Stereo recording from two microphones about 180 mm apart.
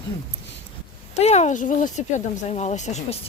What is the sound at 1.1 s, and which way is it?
Speech, 40° left (ahead or behind).